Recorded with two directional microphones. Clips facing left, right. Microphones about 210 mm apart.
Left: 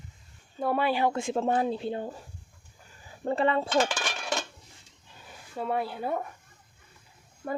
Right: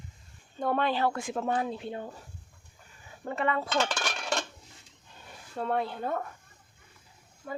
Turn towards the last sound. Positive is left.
turn(degrees=55)  # may be behind; listen again after turning